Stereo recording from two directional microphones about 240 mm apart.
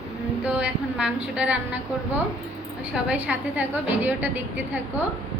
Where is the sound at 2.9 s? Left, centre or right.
Centre.